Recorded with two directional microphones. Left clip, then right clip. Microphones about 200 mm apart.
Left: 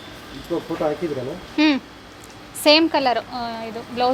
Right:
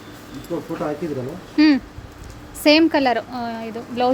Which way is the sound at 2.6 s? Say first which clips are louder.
Even; 20° right (ahead or behind).